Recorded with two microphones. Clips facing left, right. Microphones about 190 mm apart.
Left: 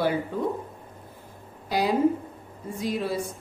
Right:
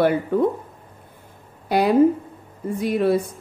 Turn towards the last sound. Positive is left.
turn(degrees=-60)  # may be behind; listen again after turning